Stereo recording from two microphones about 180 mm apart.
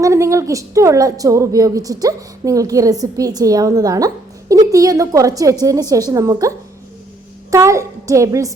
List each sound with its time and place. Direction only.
0.0 s a woman's voice: 15° right (ahead or behind)
7.5 s a woman's voice: 15° right (ahead or behind)